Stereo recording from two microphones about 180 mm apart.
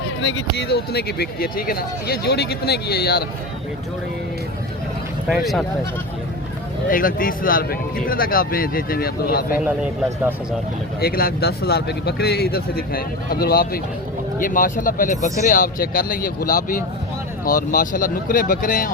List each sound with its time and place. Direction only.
0.2 s speech: 80° left; by 3.2 s 60° left (ahead or behind)
6.8 s speech: 50° left (ahead or behind)
11.0 s speech: 55° left (ahead or behind)